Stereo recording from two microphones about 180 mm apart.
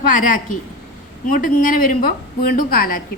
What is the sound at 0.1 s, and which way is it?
Speech, 45° left (ahead or behind).